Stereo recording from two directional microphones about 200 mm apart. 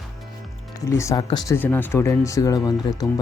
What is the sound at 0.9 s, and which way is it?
Speech, 15° left (ahead or behind).